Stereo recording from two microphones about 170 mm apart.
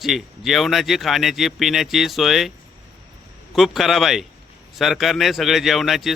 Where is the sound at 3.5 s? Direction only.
Centre (ahead or behind).